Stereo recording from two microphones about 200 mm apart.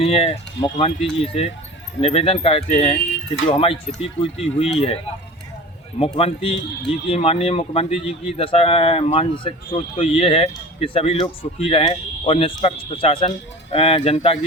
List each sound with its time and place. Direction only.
0.0 s speech: 30° left (ahead or behind)
6.0 s speech: 30° left (ahead or behind)